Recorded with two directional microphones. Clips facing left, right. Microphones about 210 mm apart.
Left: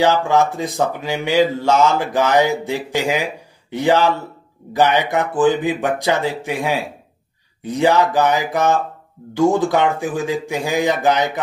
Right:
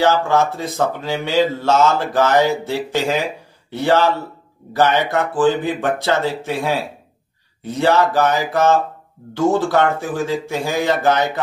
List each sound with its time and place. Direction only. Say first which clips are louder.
0.0 s speech: even; 15° left (ahead or behind)